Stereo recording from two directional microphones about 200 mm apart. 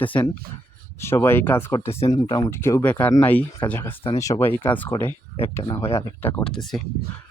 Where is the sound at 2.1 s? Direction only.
20° left (ahead or behind); by 6.8 s centre (ahead or behind).